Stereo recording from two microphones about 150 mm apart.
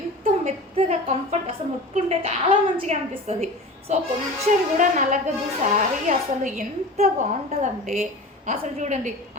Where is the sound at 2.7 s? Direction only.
40° right (ahead or behind).